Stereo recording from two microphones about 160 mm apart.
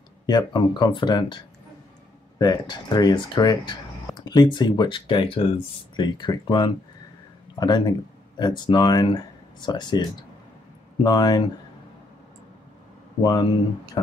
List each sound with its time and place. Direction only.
0.3 s speech: 25° left (ahead or behind)
13.2 s speech: 25° left (ahead or behind)